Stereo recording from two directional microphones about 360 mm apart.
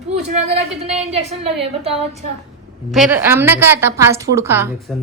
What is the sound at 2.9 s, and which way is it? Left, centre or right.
A woman's voice, centre.